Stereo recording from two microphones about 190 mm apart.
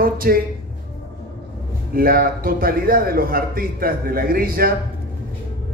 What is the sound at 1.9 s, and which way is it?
A man's voice, 50° right (ahead or behind).